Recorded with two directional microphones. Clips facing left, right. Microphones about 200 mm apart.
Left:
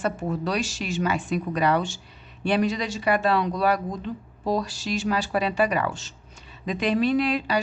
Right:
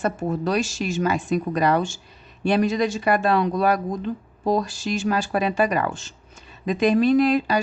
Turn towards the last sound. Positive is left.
turn(degrees=-45)  # may be behind; listen again after turning